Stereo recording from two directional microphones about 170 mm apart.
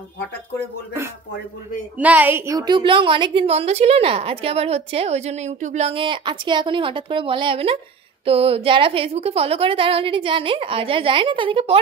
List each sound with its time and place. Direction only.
2.0 s a woman's voice: 10° right (ahead or behind); by 11.8 s 35° right (ahead or behind)